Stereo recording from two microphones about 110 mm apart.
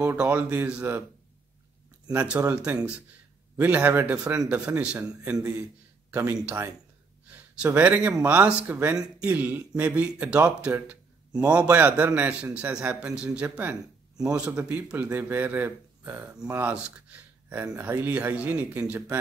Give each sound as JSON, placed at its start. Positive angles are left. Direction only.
{"t": 0.0, "sound": "a man's voice", "side_deg": -15}
{"t": 2.1, "sound": "a man's voice", "side_deg": -10}